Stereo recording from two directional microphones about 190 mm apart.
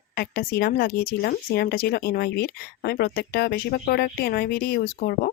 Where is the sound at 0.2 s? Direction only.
55° left (ahead or behind).